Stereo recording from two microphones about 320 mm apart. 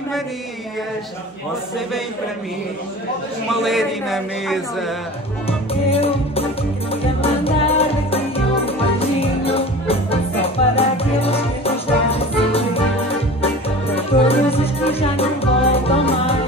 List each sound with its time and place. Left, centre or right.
3.4 s a man's voice: centre
5.9 s music: centre
13.9 s music: centre